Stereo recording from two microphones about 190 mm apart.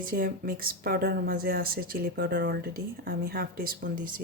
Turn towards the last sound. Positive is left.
turn(degrees=-45)  # may be behind; listen again after turning